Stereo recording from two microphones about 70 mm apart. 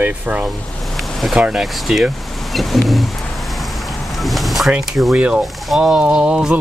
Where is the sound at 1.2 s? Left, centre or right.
Centre.